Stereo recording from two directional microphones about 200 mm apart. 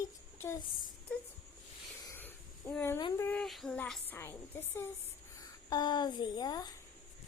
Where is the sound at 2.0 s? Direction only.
10° left (ahead or behind).